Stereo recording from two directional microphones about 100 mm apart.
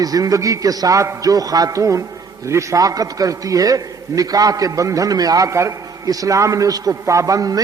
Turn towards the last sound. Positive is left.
turn(degrees=-35)  # may be behind; listen again after turning